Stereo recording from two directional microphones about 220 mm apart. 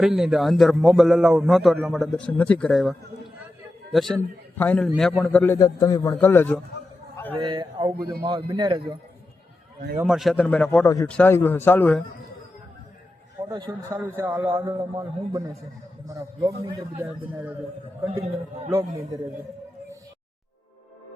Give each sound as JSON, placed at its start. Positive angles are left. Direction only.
{"t": 0.0, "sound": "a man's voice", "side_deg": 0}
{"t": 3.9, "sound": "a man's voice", "side_deg": 0}
{"t": 7.3, "sound": "speech", "side_deg": -20}
{"t": 10.0, "sound": "a man's voice", "side_deg": 0}
{"t": 13.4, "sound": "a man's voice", "side_deg": -15}
{"t": 18.7, "sound": "a man's voice", "side_deg": -15}